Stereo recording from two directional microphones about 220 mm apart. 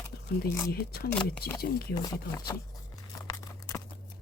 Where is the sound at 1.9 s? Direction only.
20° left (ahead or behind).